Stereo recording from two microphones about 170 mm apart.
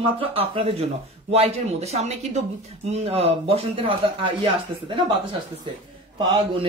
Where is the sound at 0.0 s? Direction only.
35° right (ahead or behind).